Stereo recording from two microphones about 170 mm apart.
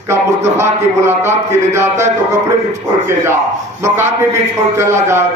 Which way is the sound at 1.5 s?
15° right (ahead or behind).